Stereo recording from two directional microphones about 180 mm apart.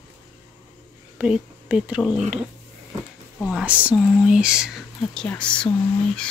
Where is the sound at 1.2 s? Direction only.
5° right (ahead or behind).